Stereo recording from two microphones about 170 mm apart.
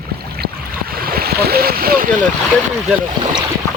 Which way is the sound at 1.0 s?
60° right (ahead or behind).